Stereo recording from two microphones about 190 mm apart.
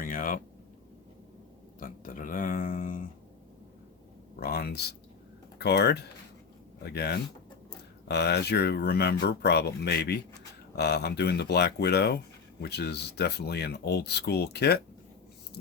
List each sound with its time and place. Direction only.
0.0 s a sound: 45° left (ahead or behind)
1.8 s speech: 45° left (ahead or behind)
4.4 s speech: 50° left (ahead or behind)